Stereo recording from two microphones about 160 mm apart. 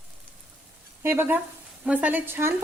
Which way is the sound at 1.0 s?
15° right (ahead or behind).